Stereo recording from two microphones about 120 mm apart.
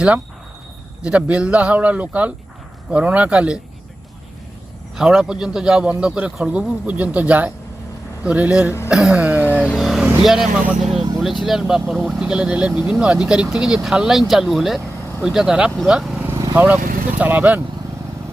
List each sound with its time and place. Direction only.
1.0 s a man's voice: 10° right (ahead or behind)
4.9 s a man's voice: 5° right (ahead or behind)
8.9 s a sound: 5° right (ahead or behind)
9.5 s vehicle: 10° left (ahead or behind)
9.7 s vehicle: centre (ahead or behind)
10.2 s speech: 5° right (ahead or behind)
16.2 s vehicle: 25° right (ahead or behind)
16.6 s a man's voice: 15° right (ahead or behind)